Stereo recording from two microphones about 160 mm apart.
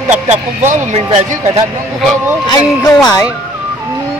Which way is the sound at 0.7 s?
40° right (ahead or behind).